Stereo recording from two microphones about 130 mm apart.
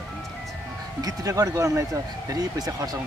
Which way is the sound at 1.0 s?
30° right (ahead or behind).